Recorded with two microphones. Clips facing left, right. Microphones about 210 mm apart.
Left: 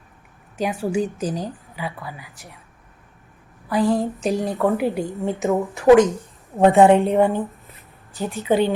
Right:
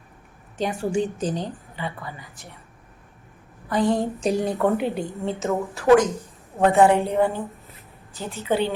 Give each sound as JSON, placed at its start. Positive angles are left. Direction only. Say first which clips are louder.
{"t": 0.5, "sound": "a woman's voice", "louder": "left 1 dB", "side_deg": 5}
{"t": 3.7, "sound": "a woman's voice", "louder": "left 2 dB", "side_deg": 0}
{"t": 5.4, "sound": "a woman's voice", "louder": "left 5 dB", "side_deg": 15}